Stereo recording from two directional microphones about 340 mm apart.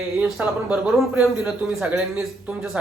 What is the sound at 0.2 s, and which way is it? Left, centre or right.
A man's voice, centre.